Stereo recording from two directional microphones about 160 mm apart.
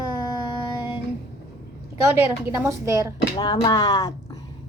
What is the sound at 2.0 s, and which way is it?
A woman's voice, 20° right (ahead or behind).